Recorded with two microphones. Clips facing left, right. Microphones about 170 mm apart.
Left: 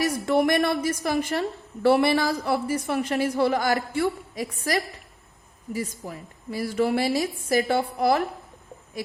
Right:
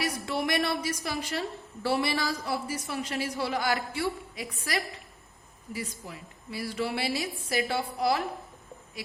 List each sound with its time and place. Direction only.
0.0 s a woman's voice: 50° left (ahead or behind)